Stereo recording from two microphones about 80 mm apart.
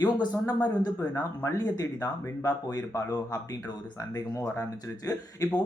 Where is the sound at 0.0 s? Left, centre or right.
Left.